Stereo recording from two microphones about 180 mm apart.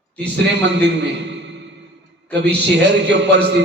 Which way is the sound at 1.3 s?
75° right (ahead or behind).